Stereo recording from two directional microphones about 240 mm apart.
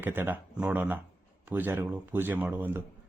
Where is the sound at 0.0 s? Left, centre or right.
Centre.